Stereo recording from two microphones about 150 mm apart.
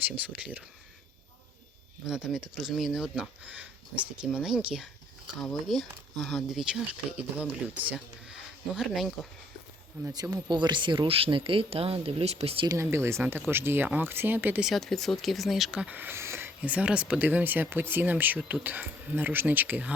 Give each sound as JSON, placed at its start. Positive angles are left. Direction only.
{"t": 0.2, "sound": "speech", "side_deg": -10}
{"t": 2.0, "sound": "speech", "side_deg": -5}
{"t": 10.0, "sound": "speech", "side_deg": -25}
{"t": 12.6, "sound": "speech", "side_deg": -20}
{"t": 14.7, "sound": "speech", "side_deg": 0}